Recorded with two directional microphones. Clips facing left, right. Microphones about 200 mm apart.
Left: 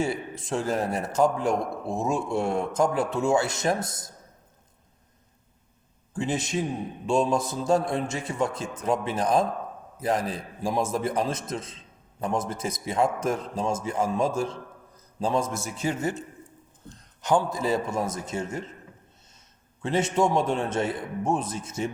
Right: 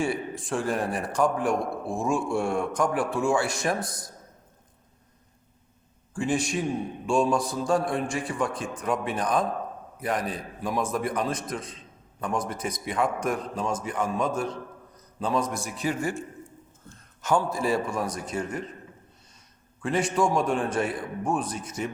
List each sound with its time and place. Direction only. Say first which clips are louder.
0.0 s a man's voice: even; 25° left (ahead or behind)
6.1 s a man's voice: right 1 dB; 20° left (ahead or behind)
19.8 s a man's voice: left 1 dB; 25° left (ahead or behind)